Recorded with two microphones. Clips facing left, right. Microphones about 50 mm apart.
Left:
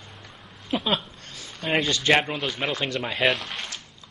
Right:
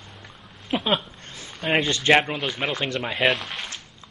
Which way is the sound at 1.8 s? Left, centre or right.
Right.